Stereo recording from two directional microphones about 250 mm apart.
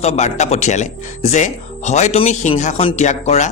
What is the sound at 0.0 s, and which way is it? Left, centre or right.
Speech, left.